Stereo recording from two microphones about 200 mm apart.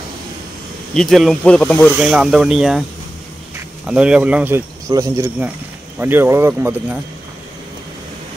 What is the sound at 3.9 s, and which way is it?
Speech, 5° right (ahead or behind).